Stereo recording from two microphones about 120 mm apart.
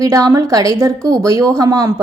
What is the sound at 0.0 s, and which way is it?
A woman's voice, 30° right (ahead or behind).